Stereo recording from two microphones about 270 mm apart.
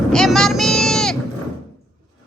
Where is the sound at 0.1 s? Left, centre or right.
Centre.